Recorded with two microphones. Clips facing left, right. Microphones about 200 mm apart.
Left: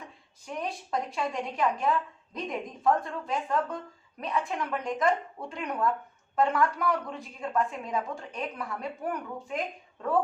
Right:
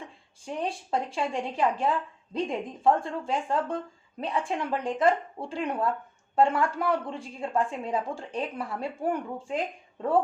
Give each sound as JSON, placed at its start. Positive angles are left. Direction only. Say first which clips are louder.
{"t": 0.0, "sound": "a woman's voice", "louder": "right 4 dB", "side_deg": -30}